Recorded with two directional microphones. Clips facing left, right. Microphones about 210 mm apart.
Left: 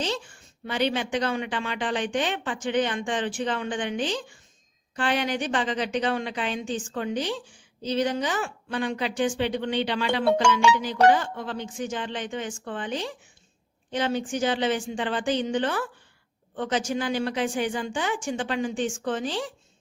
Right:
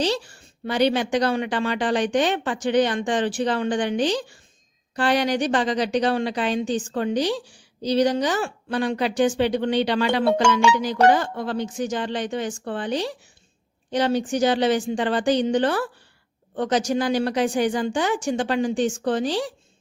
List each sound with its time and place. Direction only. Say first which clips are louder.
0.7 s a woman's voice: right 5 dB; 40° right (ahead or behind)